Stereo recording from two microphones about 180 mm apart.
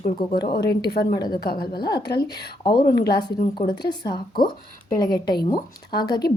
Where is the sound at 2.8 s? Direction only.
60° left (ahead or behind).